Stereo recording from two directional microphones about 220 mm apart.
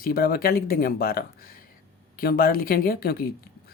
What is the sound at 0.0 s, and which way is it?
Speech, 45° left (ahead or behind).